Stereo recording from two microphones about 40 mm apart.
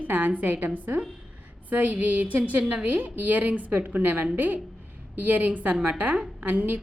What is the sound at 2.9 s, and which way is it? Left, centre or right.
A woman's voice, right.